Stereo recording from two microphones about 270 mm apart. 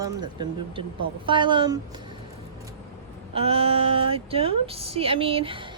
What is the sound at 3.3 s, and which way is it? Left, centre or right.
Speech, right.